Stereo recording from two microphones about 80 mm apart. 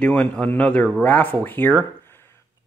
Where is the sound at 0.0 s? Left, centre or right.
Centre.